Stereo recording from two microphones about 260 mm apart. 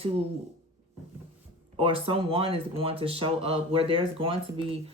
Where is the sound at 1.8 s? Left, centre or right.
Right.